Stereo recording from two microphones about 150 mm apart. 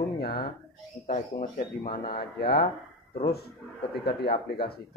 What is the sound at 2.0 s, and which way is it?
Speech, 90° left.